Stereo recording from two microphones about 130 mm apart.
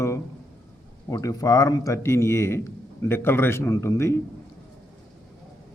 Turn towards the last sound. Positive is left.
turn(degrees=20)  # may be behind; listen again after turning